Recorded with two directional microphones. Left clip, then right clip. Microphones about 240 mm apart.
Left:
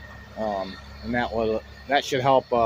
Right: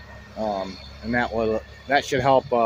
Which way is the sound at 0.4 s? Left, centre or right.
Right.